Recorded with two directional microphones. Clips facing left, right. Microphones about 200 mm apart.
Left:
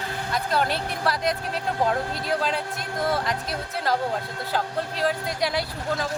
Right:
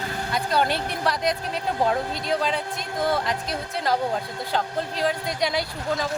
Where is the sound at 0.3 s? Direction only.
Centre (ahead or behind).